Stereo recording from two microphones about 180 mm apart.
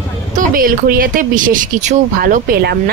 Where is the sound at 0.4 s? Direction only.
50° right (ahead or behind).